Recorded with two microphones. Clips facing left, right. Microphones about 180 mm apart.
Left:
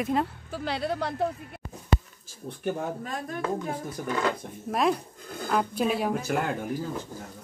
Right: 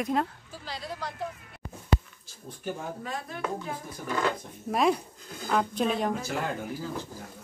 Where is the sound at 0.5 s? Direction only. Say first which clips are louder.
Left 9 dB; 65° left (ahead or behind).